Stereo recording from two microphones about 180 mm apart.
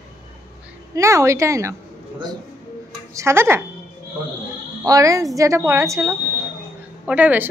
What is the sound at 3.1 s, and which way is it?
Speech, 15° right (ahead or behind).